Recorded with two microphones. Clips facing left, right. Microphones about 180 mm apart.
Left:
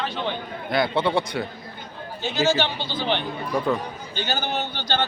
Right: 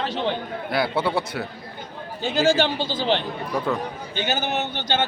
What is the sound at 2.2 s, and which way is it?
Speech, 50° right (ahead or behind).